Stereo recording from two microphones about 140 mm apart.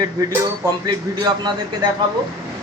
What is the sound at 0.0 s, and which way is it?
Speech, 25° right (ahead or behind).